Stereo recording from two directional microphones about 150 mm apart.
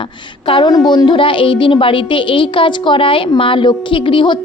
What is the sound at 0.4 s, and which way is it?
A woman's voice, 35° left (ahead or behind).